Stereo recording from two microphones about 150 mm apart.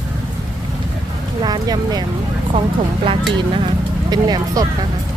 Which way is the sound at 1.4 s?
25° right (ahead or behind).